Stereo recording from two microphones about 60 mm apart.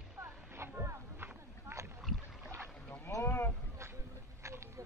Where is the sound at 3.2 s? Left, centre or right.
Left.